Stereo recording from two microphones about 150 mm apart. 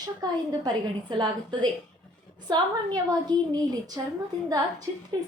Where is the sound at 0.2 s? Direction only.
25° right (ahead or behind).